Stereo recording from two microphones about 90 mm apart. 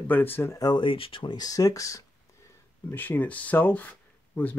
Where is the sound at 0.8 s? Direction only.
75° left (ahead or behind).